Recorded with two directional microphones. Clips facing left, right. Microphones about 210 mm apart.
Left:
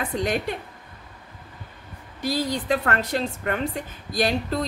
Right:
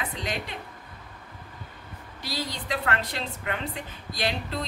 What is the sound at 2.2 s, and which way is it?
A woman's voice, 50° left (ahead or behind).